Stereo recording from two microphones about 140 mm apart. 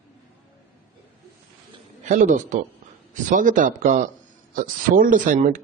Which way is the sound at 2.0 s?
65° right (ahead or behind).